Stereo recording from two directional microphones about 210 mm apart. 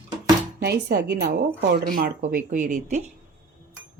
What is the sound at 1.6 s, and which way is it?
A woman's voice, 45° right (ahead or behind).